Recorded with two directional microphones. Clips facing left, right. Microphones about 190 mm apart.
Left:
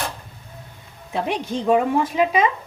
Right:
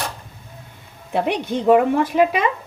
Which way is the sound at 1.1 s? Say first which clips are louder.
Right 3 dB; 60° right (ahead or behind).